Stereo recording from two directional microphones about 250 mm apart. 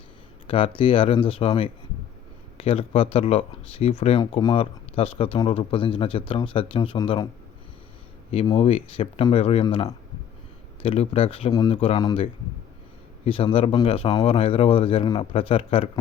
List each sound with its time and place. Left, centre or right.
0.4 s speech: left
8.3 s speech: left